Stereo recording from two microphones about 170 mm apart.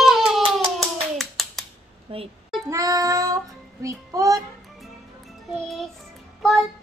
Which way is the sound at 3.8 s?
20° right (ahead or behind).